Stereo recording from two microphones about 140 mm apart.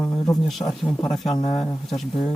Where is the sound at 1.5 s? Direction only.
30° left (ahead or behind).